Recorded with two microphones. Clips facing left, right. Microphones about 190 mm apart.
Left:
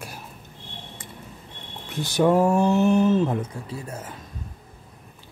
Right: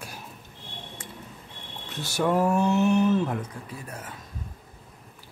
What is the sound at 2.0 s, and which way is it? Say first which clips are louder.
Speech: left 5 dB; 20° left (ahead or behind).